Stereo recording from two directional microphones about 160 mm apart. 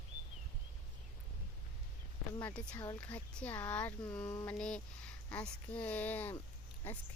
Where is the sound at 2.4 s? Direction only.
5° left (ahead or behind).